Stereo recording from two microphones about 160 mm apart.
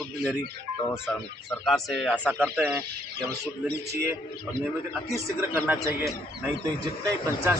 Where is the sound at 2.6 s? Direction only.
10° right (ahead or behind).